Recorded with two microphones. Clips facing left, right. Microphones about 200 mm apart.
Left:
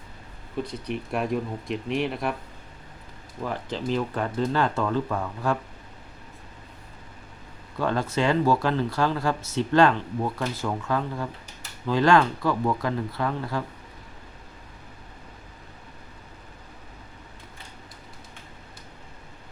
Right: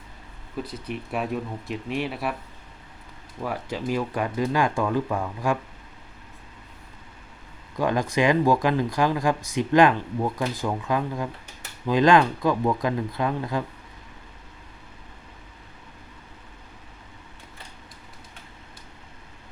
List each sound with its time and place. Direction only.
0.6 s speech: 5° right (ahead or behind)
3.4 s speech: 10° right (ahead or behind)
7.8 s speech: 15° right (ahead or behind)